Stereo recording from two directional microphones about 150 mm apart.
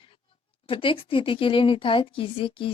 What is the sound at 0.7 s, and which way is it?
A woman's voice, 35° left (ahead or behind).